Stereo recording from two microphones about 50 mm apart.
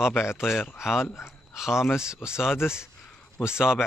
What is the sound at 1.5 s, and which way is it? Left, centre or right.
Speech, centre.